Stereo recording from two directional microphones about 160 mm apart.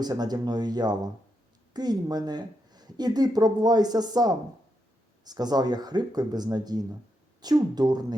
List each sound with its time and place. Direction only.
0.0 s speech: 25° right (ahead or behind)